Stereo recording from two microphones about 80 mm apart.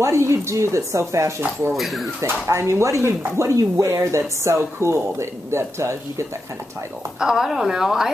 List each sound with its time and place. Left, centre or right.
0.0 s speech: right
1.7 s speech: centre
2.2 s speech: right
7.2 s a woman's voice: centre